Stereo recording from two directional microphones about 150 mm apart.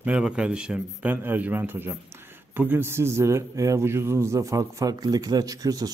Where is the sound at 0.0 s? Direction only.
5° right (ahead or behind).